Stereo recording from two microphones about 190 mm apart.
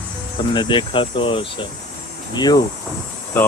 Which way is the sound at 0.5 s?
25° left (ahead or behind).